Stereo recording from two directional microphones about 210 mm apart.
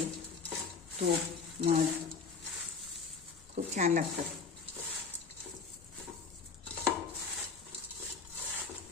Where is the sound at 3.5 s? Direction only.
35° right (ahead or behind).